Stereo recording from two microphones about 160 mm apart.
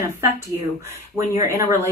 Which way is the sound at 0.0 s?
15° right (ahead or behind).